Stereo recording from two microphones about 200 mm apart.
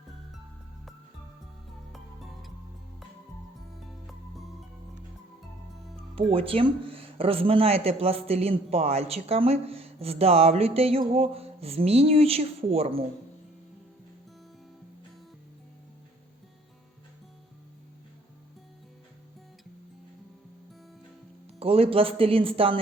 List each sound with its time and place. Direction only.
4.0 s music: centre (ahead or behind)
6.1 s speech: 30° right (ahead or behind)
21.6 s speech: 30° right (ahead or behind)